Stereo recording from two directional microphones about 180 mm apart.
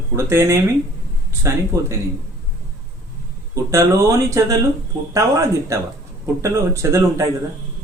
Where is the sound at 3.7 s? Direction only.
15° right (ahead or behind).